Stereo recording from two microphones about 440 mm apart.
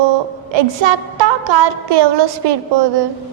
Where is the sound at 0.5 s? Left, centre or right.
Right.